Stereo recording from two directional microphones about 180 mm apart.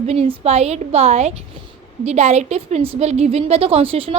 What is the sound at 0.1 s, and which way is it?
A woman's voice, 35° right (ahead or behind).